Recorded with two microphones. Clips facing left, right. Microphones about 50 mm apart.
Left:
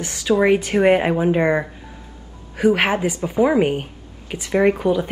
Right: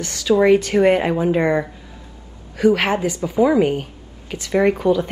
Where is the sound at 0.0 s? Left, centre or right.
Centre.